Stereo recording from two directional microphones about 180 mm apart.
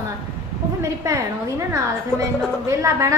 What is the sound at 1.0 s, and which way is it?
Speech, 15° right (ahead or behind).